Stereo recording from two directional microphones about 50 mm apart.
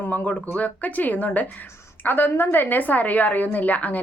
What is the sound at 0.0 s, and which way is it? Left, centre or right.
A woman's voice, left.